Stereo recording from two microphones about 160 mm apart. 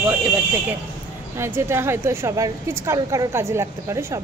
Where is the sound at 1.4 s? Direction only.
15° right (ahead or behind).